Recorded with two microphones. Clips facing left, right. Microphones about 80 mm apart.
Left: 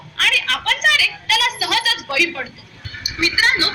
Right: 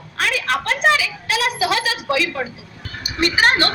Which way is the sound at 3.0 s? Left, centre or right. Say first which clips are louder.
Right 2 dB; right.